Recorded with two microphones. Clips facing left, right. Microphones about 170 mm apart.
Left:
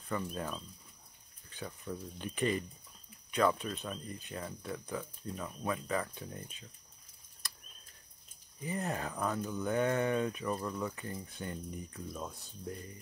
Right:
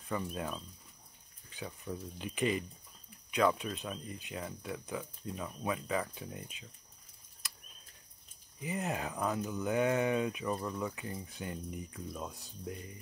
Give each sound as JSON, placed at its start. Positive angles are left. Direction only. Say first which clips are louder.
{"t": 0.1, "sound": "speech", "louder": "even", "side_deg": -5}
{"t": 1.9, "sound": "speech", "louder": "even", "side_deg": -10}
{"t": 8.6, "sound": "speech", "louder": "even", "side_deg": -15}
{"t": 12.4, "sound": "speech", "louder": "even", "side_deg": -15}